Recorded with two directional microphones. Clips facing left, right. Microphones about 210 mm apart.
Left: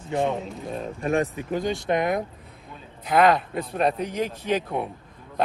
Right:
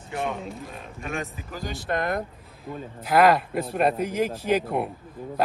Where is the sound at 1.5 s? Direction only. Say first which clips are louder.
Left 9 dB; centre (ahead or behind).